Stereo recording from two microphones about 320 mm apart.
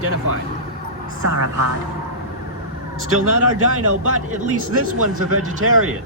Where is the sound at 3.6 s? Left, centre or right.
Right.